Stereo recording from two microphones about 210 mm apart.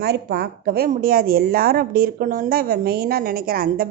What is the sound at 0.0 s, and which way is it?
A woman's voice, 50° right (ahead or behind).